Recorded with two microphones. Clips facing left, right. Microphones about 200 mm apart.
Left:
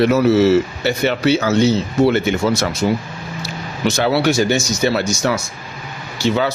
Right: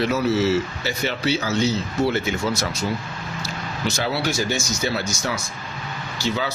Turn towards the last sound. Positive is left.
turn(degrees=65)  # may be behind; listen again after turning